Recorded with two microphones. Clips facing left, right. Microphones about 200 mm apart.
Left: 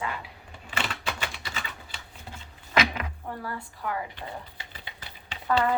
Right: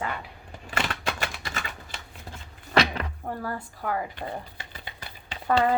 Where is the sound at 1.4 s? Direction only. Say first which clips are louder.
Right 2 dB; 50° right (ahead or behind).